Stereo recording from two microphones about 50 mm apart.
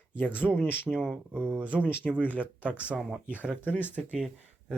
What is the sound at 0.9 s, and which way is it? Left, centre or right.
Speech, centre.